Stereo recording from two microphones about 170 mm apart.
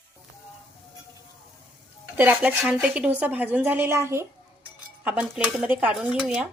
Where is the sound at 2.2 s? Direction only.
10° right (ahead or behind).